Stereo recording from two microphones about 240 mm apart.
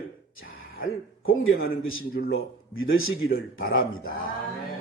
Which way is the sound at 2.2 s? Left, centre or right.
Left.